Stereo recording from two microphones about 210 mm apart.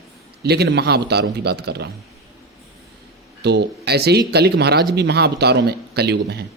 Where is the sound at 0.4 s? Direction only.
50° right (ahead or behind).